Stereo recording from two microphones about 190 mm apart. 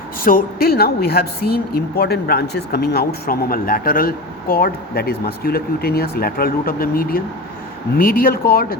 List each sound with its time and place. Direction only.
0.3 s speech: 50° left (ahead or behind)